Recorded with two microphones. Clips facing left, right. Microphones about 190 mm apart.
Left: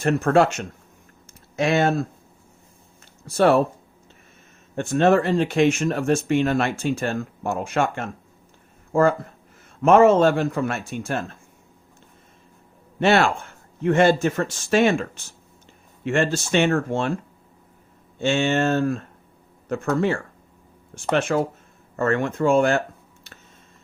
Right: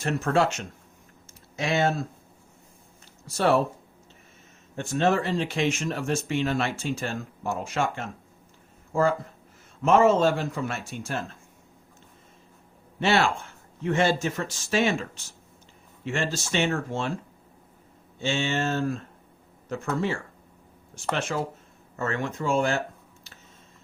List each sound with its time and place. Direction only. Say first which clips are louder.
0.0 s speech: left 6 dB; 55° left (ahead or behind)
1.3 s a sound: left 6 dB; 55° left (ahead or behind)
3.3 s speech: left 5 dB; 60° left (ahead or behind)
4.7 s speech: left 6 dB; 55° left (ahead or behind)
13.0 s speech: left 5 dB; 55° left (ahead or behind)
18.2 s speech: left 6 dB; 55° left (ahead or behind)